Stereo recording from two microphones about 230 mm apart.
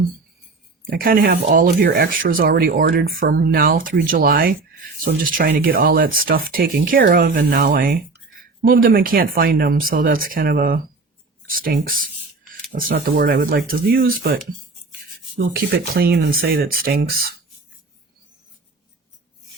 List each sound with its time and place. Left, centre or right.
0.9 s speech: right
15.5 s speech: right